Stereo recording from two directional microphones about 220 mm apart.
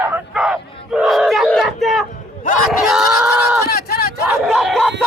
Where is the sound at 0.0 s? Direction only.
5° right (ahead or behind).